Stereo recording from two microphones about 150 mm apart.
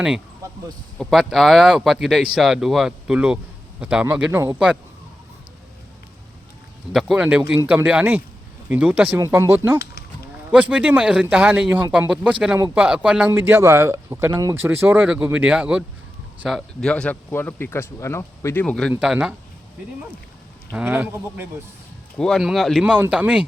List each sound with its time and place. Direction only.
0.9 s speech: centre (ahead or behind)
6.9 s a man's voice: 5° right (ahead or behind)
9.1 s a man's voice: 20° right (ahead or behind); by 18.6 s 20° left (ahead or behind)
18.6 s speech: 5° left (ahead or behind)
18.9 s speech: 5° right (ahead or behind)
20.7 s a man's voice: 10° right (ahead or behind)
22.2 s speech: centre (ahead or behind)